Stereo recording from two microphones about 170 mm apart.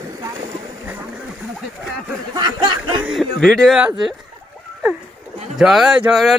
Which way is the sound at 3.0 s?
Centre (ahead or behind).